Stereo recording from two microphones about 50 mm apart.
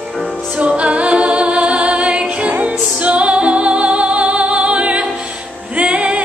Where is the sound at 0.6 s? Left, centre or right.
Right.